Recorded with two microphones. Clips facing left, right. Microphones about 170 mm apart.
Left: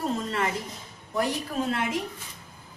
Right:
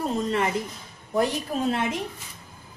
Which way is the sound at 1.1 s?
25° right (ahead or behind).